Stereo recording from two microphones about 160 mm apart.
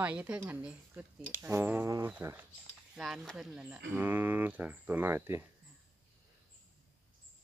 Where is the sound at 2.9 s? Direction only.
Centre (ahead or behind).